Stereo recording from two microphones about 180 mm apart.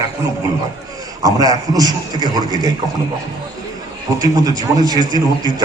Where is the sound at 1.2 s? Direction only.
20° right (ahead or behind).